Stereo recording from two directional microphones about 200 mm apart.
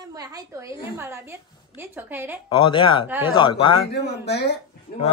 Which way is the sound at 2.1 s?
10° right (ahead or behind).